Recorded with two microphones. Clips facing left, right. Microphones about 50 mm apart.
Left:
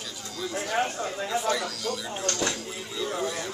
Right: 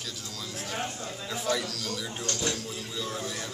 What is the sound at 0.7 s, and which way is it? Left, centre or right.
Speech, left.